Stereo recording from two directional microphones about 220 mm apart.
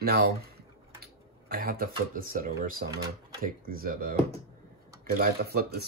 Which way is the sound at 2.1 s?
40° right (ahead or behind).